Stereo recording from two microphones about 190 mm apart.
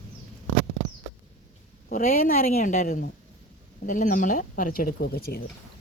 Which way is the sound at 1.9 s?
45° left (ahead or behind).